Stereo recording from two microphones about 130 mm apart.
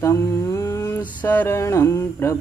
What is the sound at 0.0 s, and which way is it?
Mantra, 20° left (ahead or behind).